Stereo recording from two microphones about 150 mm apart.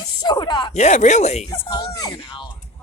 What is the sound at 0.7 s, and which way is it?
Speech, 50° left (ahead or behind).